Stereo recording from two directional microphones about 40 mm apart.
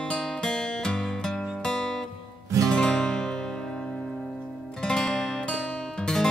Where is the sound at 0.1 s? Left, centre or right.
Centre.